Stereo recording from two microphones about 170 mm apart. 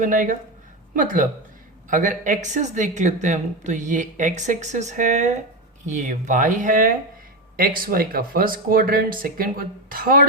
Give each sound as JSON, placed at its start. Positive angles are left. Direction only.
{"t": 0.0, "sound": "speech", "side_deg": -50}